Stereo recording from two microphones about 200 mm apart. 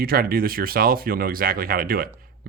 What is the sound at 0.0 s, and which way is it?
Speech, 45° right (ahead or behind).